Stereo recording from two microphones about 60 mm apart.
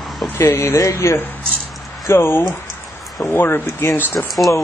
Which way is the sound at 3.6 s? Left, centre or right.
Left.